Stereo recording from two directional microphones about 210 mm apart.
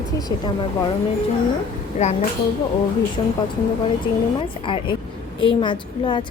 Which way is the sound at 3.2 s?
25° left (ahead or behind).